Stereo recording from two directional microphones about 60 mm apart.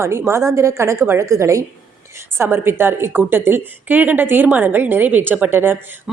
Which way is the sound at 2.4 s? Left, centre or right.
Right.